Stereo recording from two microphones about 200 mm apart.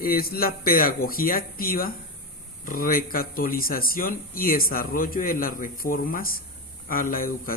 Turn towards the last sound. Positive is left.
turn(degrees=45)  # may be behind; listen again after turning